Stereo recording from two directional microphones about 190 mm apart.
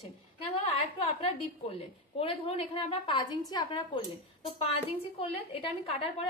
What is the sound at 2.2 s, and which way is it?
A woman's voice, 30° left (ahead or behind).